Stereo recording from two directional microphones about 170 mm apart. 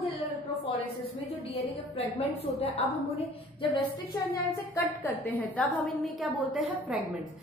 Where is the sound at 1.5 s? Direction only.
35° left (ahead or behind).